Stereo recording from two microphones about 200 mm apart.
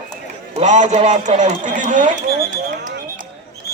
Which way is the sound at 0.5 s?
35° right (ahead or behind).